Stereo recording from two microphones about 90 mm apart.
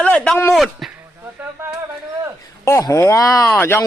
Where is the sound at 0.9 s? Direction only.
20° right (ahead or behind).